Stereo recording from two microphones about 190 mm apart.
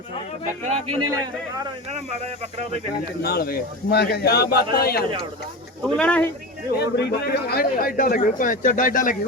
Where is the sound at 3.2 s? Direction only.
55° left (ahead or behind).